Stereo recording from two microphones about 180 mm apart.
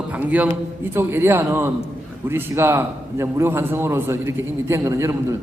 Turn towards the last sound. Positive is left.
turn(degrees=-15)  # may be behind; listen again after turning